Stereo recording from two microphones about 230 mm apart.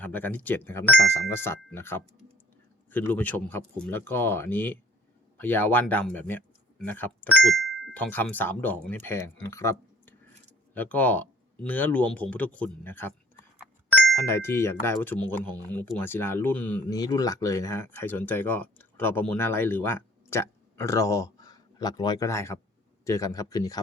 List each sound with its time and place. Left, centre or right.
0.0 s speech: centre